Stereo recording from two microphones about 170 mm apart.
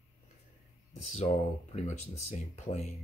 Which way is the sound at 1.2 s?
40° left (ahead or behind).